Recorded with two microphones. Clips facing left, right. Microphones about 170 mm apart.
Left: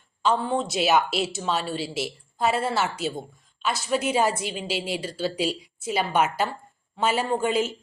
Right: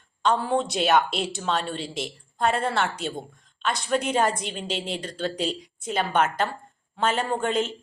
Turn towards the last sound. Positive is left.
turn(degrees=5)  # may be behind; listen again after turning